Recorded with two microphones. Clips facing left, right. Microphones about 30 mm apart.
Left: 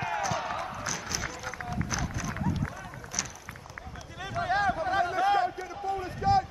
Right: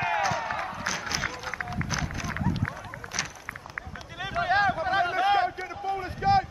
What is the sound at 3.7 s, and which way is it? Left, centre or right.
Run, right.